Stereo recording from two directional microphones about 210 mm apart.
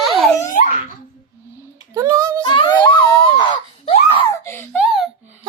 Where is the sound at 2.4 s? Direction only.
20° left (ahead or behind).